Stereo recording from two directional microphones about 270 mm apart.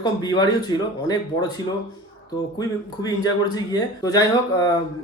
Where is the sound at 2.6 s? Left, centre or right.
Centre.